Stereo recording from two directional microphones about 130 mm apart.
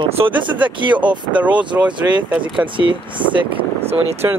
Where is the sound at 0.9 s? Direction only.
10° right (ahead or behind).